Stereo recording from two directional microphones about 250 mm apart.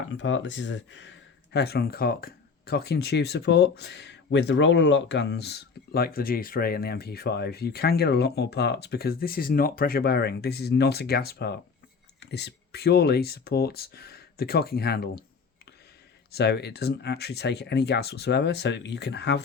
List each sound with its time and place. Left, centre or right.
0.1 s speech: left
16.3 s speech: left